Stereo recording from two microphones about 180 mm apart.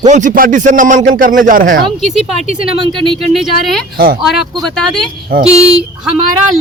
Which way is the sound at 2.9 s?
25° right (ahead or behind).